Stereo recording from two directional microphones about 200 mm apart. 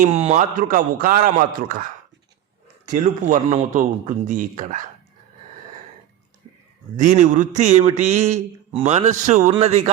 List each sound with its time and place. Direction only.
0.0 s a man's voice: 35° right (ahead or behind)
2.9 s a man's voice: 40° right (ahead or behind)
6.9 s a man's voice: 40° right (ahead or behind)